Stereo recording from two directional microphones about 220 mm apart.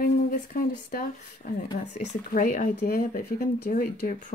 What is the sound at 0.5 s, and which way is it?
Speech, 40° left (ahead or behind).